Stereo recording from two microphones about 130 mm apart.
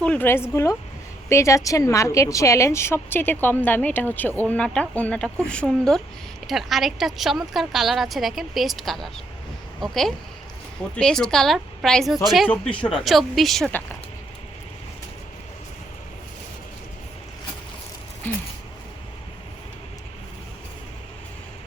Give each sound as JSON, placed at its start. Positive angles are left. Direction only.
{"t": 0.0, "sound": "a woman's voice", "side_deg": 10}
{"t": 12.5, "sound": "a woman's voice", "side_deg": 10}
{"t": 18.3, "sound": "a sound", "side_deg": 15}